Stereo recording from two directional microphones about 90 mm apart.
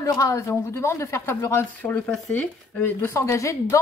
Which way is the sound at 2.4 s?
15° left (ahead or behind).